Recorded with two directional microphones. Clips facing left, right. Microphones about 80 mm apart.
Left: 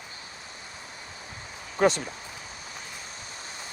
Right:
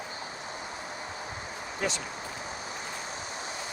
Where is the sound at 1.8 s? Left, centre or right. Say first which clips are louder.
Left 10 dB; left.